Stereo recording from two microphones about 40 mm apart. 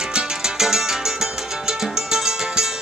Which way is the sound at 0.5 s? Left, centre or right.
Centre.